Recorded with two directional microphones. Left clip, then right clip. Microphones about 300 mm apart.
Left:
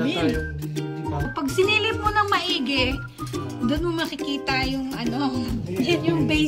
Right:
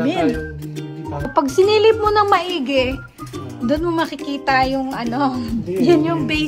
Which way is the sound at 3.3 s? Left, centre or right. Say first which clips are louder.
Right 5 dB; centre.